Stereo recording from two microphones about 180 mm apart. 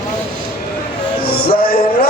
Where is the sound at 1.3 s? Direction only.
55° left (ahead or behind).